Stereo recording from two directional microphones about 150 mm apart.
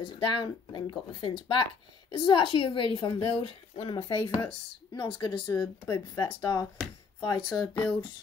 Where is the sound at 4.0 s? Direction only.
15° left (ahead or behind).